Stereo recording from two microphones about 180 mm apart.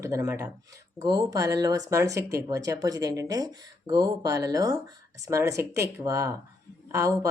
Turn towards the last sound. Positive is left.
turn(degrees=-20)  # may be behind; listen again after turning